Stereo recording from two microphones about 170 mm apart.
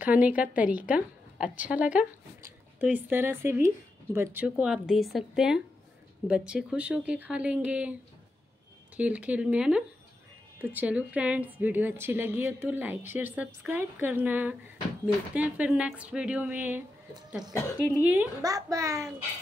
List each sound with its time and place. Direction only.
0.0 s a woman's voice: 10° right (ahead or behind)
8.9 s a woman's voice: 10° right (ahead or behind)
18.4 s a child's voice: 20° right (ahead or behind)